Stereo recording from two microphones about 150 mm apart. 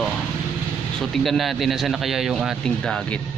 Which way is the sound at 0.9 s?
Centre (ahead or behind).